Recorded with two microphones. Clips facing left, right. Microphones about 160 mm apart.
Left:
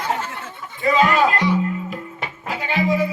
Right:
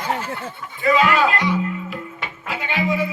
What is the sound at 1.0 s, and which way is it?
Music, 40° left (ahead or behind).